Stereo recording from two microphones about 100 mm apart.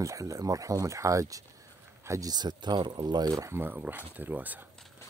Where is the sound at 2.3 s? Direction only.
45° right (ahead or behind); by 4.6 s 20° right (ahead or behind).